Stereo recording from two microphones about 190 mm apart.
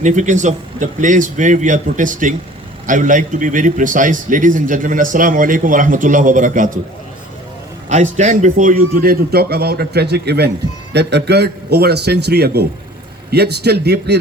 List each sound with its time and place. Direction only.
0.0 s a man's voice: 40° right (ahead or behind)
7.9 s a man's voice: 40° right (ahead or behind); by 14.2 s 60° right (ahead or behind)